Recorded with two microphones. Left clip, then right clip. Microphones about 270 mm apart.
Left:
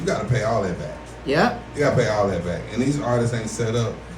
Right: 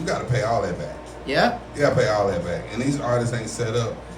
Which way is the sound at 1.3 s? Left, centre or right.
Left.